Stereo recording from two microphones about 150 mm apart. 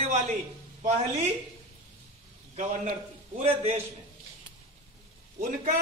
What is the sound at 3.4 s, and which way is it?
Speech, 40° right (ahead or behind).